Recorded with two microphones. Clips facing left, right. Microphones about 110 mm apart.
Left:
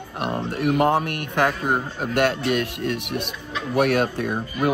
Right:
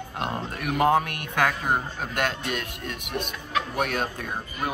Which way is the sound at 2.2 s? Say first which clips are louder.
Left 8 dB; 55° left (ahead or behind).